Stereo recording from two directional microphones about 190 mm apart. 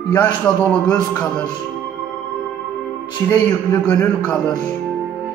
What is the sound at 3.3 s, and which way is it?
Speech, 20° left (ahead or behind).